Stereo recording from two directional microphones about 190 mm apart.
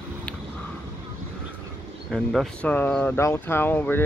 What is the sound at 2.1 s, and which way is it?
Speech, centre (ahead or behind).